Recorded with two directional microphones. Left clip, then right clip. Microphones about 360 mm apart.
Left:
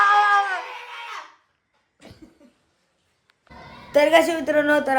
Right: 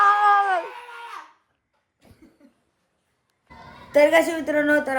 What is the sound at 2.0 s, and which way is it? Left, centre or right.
Cough, left.